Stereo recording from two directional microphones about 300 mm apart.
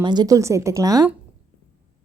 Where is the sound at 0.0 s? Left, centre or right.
Centre.